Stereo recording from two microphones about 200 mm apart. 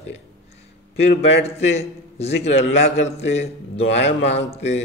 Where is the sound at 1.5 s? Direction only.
30° left (ahead or behind).